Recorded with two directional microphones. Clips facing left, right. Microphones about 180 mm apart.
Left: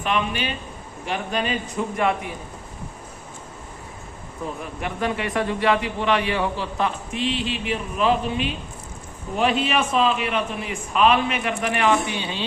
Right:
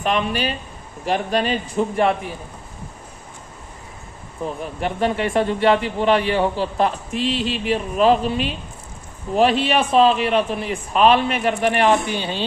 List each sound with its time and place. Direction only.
0.0 s a man's voice: 40° right (ahead or behind)
4.8 s a man's voice: 30° right (ahead or behind)